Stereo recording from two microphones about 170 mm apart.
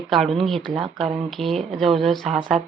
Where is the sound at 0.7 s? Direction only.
30° right (ahead or behind).